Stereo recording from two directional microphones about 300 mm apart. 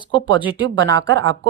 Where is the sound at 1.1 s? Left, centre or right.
Right.